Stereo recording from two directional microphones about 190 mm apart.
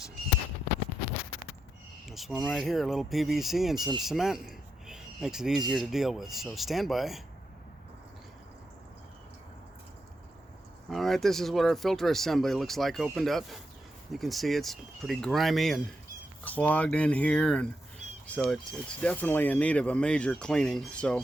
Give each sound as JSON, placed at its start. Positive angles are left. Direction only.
{"t": 2.0, "sound": "a man's voice", "side_deg": 0}
{"t": 10.8, "sound": "a man's voice", "side_deg": 0}